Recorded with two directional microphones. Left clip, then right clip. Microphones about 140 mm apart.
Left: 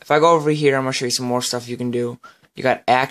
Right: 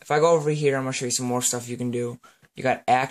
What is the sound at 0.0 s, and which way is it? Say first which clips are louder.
Speech: left 5 dB; 30° left (ahead or behind).